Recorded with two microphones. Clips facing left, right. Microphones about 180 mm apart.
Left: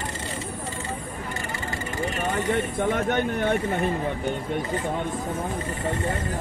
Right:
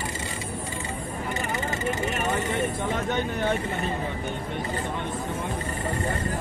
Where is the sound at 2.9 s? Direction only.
55° left (ahead or behind).